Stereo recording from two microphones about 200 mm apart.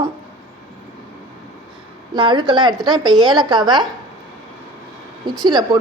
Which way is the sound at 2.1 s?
25° right (ahead or behind).